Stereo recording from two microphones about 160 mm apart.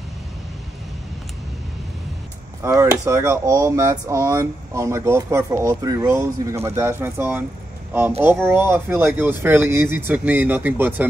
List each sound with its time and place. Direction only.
2.6 s speech: 15° right (ahead or behind)